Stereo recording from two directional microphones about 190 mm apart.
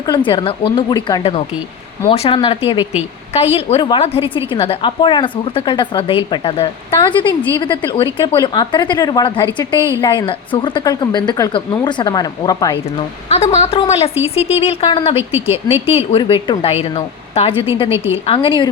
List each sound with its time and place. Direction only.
0.0 s a woman's voice: 25° left (ahead or behind)
13.2 s a woman's voice: 35° left (ahead or behind)
15.2 s a woman's voice: 10° right (ahead or behind)
15.7 s a woman's voice: 30° left (ahead or behind)